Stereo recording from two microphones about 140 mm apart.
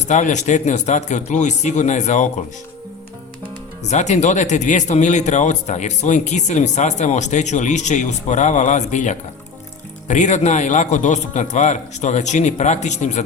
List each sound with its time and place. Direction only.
0.1 s a man's voice: 60° left (ahead or behind)
3.8 s a man's voice: 55° left (ahead or behind)